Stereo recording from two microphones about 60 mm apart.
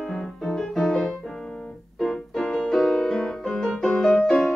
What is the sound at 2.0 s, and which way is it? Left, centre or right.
Music, centre.